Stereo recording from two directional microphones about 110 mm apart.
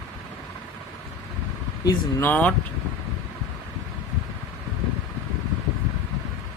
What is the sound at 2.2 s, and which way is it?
Speech, 15° left (ahead or behind).